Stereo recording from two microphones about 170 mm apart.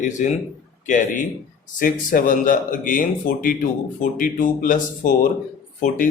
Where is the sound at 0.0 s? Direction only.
45° left (ahead or behind).